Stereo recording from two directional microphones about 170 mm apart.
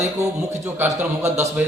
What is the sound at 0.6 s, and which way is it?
A man's voice, 10° right (ahead or behind).